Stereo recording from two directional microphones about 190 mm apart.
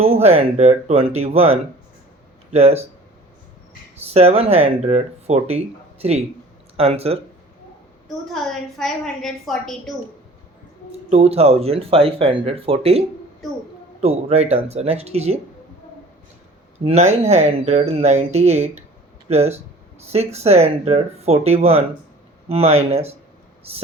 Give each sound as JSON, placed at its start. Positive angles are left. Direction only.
{"t": 0.0, "sound": "speech", "side_deg": -35}
{"t": 4.1, "sound": "speech", "side_deg": -35}
{"t": 8.0, "sound": "a woman's voice", "side_deg": 0}
{"t": 11.1, "sound": "speech", "side_deg": -35}
{"t": 16.8, "sound": "speech", "side_deg": -35}